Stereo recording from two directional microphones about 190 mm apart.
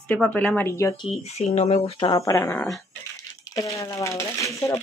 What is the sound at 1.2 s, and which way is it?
Speech, 35° left (ahead or behind).